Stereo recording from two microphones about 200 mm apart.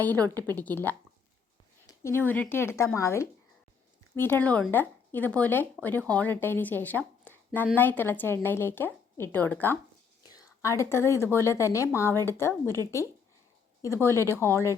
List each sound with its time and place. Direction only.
0.2 s a woman's voice: 20° right (ahead or behind)
0.5 s a woman's voice: 10° left (ahead or behind)
13.8 s a woman's voice: 15° left (ahead or behind)